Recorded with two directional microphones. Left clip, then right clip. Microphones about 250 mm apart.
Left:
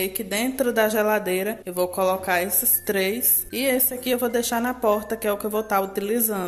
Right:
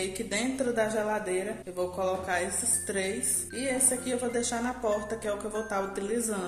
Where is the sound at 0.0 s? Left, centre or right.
Left.